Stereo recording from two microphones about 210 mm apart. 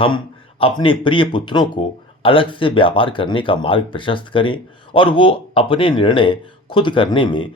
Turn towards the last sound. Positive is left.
turn(degrees=25)  # may be behind; listen again after turning